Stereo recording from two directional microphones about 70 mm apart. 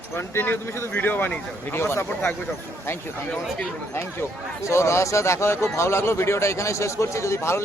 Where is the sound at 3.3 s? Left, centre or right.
Centre.